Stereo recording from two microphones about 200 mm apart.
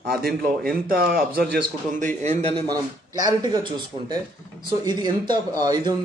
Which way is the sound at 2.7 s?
20° right (ahead or behind).